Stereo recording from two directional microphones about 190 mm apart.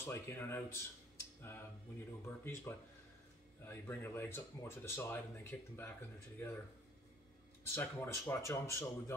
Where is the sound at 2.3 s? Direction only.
10° left (ahead or behind).